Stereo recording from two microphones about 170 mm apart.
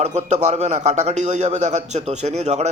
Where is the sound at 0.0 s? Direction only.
40° right (ahead or behind).